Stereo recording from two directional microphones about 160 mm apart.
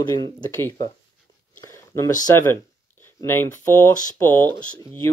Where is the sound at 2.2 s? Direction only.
15° left (ahead or behind).